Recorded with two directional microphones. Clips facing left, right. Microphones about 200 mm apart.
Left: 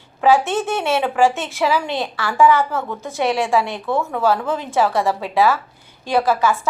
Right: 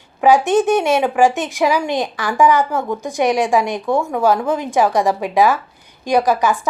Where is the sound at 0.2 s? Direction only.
15° right (ahead or behind).